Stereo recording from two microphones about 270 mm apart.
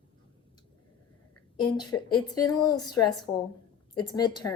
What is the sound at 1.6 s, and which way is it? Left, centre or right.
A woman's voice, centre.